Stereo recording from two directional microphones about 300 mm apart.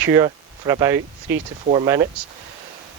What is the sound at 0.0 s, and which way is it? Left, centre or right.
Speech, centre.